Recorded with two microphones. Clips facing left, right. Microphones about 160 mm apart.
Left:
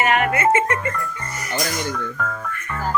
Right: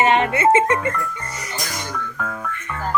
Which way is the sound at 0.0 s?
25° right (ahead or behind).